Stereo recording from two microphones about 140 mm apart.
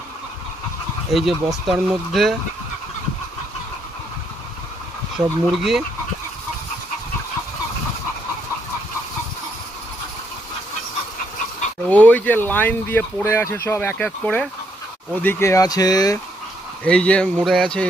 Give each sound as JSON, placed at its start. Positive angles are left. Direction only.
{"t": 1.1, "sound": "speech", "side_deg": 0}
{"t": 5.1, "sound": "speech", "side_deg": 0}
{"t": 11.9, "sound": "speech", "side_deg": 10}
{"t": 16.8, "sound": "speech", "side_deg": 10}